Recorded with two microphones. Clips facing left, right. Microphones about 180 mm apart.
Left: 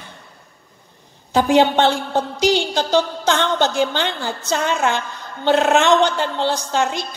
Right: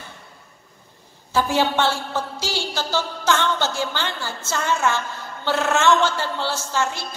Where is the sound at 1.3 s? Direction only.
20° left (ahead or behind).